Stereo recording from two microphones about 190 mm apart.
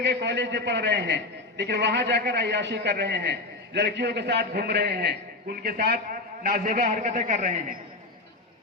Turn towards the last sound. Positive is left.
turn(degrees=-40)  # may be behind; listen again after turning